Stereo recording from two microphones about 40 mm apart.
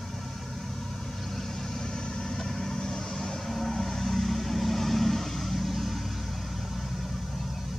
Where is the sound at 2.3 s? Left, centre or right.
Centre.